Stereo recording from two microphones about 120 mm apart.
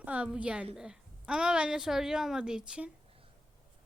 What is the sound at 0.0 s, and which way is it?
A woman's voice, 10° right (ahead or behind).